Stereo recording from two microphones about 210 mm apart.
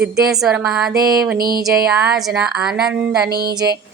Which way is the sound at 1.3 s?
45° right (ahead or behind).